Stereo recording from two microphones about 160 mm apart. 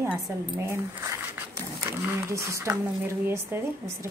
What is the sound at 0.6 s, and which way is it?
Speech, 20° right (ahead or behind).